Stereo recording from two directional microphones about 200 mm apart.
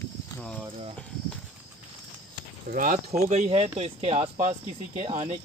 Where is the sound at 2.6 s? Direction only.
45° right (ahead or behind).